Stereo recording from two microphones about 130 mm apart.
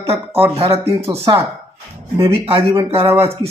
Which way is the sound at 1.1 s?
25° right (ahead or behind).